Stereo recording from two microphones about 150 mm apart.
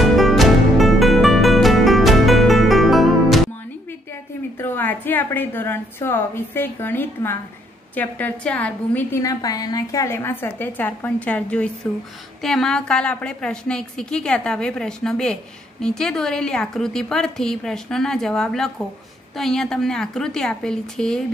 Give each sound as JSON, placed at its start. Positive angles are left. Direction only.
{"t": 0.0, "sound": "music", "side_deg": 0}
{"t": 4.6, "sound": "a woman's voice", "side_deg": 15}
{"t": 9.2, "sound": "a woman's voice", "side_deg": 25}